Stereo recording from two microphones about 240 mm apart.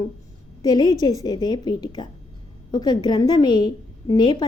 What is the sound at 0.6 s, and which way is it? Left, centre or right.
A woman's voice, centre.